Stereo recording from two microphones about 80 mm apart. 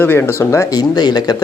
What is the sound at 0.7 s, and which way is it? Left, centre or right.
Speech, left.